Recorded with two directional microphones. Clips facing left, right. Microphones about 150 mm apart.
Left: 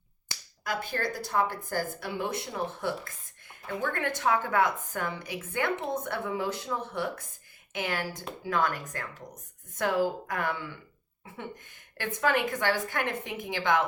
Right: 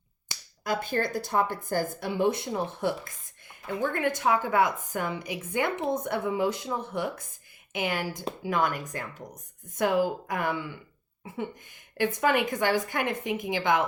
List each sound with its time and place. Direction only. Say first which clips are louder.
0.6 s a woman's voice: right 4 dB; 25° right (ahead or behind)
11.9 s a woman's voice: right 3 dB; 15° right (ahead or behind)